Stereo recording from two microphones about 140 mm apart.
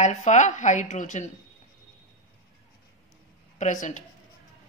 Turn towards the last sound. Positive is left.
turn(degrees=60)  # may be behind; listen again after turning